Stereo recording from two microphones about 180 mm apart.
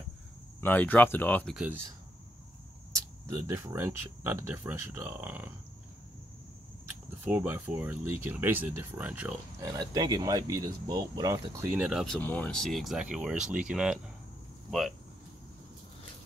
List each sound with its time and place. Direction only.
0.6 s speech: 10° left (ahead or behind)
1.5 s speech: 5° right (ahead or behind)
3.3 s speech: 15° right (ahead or behind)
7.2 s speech: 10° right (ahead or behind)
9.6 s speech: 20° right (ahead or behind)
11.7 s speech: 5° right (ahead or behind)